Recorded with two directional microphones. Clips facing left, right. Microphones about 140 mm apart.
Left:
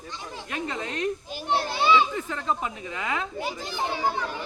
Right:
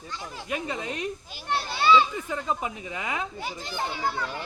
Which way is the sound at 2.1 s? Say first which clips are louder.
Left 1 dB; 15° right (ahead or behind).